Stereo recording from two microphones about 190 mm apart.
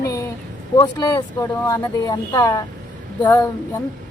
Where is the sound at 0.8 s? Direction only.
20° left (ahead or behind).